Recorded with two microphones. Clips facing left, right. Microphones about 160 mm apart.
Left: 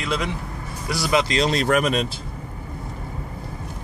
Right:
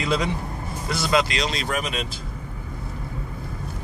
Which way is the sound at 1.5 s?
60° left (ahead or behind).